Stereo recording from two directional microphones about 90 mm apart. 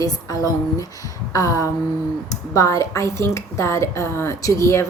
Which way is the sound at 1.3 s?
40° left (ahead or behind).